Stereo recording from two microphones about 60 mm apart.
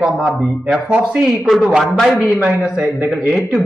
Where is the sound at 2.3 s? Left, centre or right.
Centre.